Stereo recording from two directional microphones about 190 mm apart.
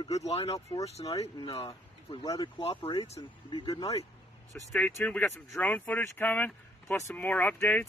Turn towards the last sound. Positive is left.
turn(degrees=5)  # may be behind; listen again after turning